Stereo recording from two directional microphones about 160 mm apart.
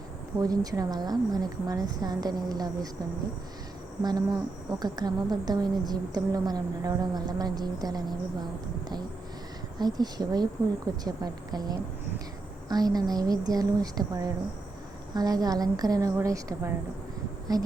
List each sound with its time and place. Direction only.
0.4 s a woman's voice: 25° right (ahead or behind)
4.0 s a woman's voice: 25° right (ahead or behind)
9.7 s a woman's voice: 25° right (ahead or behind)